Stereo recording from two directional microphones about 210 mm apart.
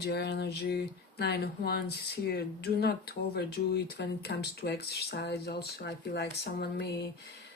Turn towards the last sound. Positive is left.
turn(degrees=50)  # may be behind; listen again after turning